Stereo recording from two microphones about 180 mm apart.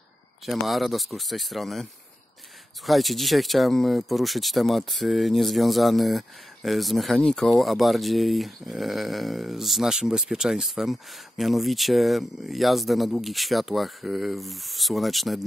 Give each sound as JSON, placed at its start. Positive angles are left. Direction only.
{"t": 0.5, "sound": "speech", "side_deg": 0}